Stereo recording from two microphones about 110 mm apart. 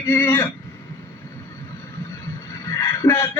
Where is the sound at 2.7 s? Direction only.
30° left (ahead or behind).